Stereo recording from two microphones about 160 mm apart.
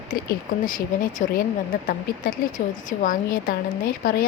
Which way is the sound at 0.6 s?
60° left (ahead or behind).